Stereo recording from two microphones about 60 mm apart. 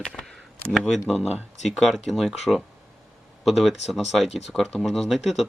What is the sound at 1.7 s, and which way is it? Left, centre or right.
Speech, centre.